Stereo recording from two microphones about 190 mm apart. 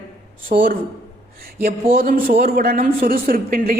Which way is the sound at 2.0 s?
45° right (ahead or behind).